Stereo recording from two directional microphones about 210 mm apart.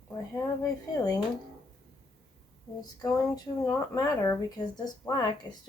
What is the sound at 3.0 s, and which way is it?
Speech, 15° left (ahead or behind).